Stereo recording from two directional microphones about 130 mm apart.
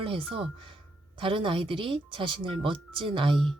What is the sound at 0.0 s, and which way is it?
Speech, 45° right (ahead or behind).